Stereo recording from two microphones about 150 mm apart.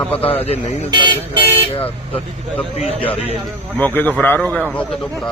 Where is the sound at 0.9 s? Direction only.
30° right (ahead or behind).